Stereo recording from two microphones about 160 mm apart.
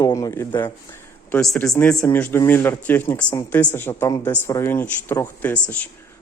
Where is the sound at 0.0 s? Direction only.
20° left (ahead or behind).